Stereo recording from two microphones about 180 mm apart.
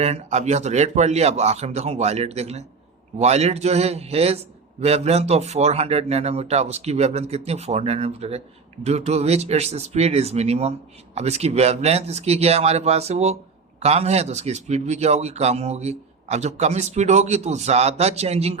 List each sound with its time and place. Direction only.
0.0 s speech: 35° right (ahead or behind)